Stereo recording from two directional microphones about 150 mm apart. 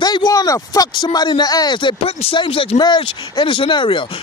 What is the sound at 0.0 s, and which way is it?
Speech, 30° left (ahead or behind).